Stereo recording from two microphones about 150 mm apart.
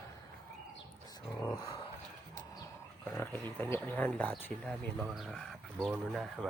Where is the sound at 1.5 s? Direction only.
25° left (ahead or behind).